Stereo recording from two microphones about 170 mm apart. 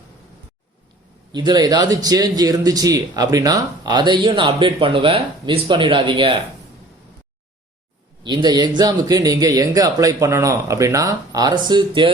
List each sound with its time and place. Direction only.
1.3 s a man's voice: 25° right (ahead or behind)
8.2 s a man's voice: 25° right (ahead or behind)